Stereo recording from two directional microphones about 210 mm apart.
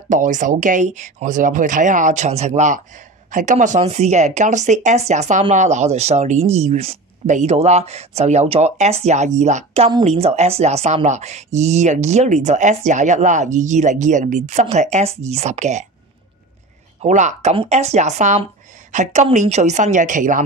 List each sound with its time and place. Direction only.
0.1 s speech: 35° right (ahead or behind)
17.0 s speech: 35° right (ahead or behind)